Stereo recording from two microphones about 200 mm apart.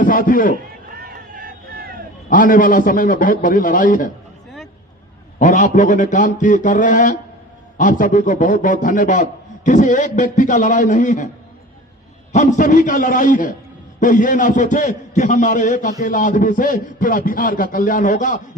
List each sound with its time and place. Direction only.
0.0 s a man's voice: 45° left (ahead or behind)
0.9 s vehicle: 45° right (ahead or behind)
2.3 s a man's voice: 45° left (ahead or behind)
5.4 s a man's voice: 40° left (ahead or behind)
12.3 s a man's voice: 35° left (ahead or behind)